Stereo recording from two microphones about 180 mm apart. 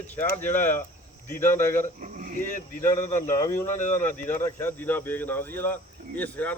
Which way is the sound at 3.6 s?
45° left (ahead or behind).